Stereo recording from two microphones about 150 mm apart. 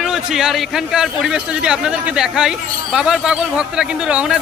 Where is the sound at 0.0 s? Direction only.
Centre (ahead or behind).